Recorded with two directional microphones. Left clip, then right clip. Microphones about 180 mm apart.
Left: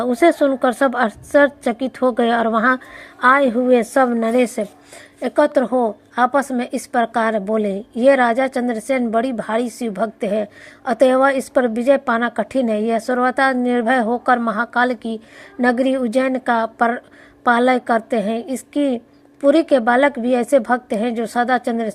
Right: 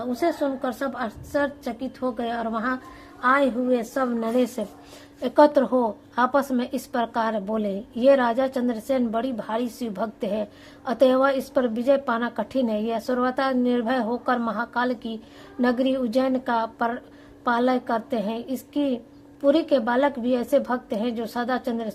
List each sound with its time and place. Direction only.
0.0 s a woman's voice: 40° left (ahead or behind)